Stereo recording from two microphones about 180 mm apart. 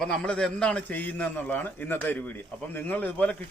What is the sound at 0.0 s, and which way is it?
A man's voice, 5° left (ahead or behind).